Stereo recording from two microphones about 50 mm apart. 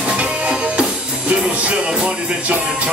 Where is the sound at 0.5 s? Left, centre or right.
Centre.